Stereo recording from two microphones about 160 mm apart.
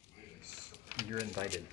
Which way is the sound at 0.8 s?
15° right (ahead or behind).